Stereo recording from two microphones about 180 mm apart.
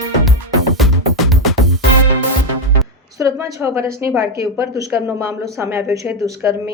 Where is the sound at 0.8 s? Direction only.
Centre (ahead or behind).